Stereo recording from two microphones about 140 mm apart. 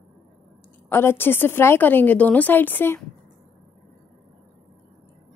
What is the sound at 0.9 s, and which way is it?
A woman's voice, 15° left (ahead or behind).